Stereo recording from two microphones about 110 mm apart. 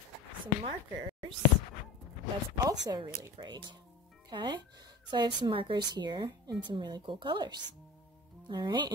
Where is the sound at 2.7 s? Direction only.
35° right (ahead or behind).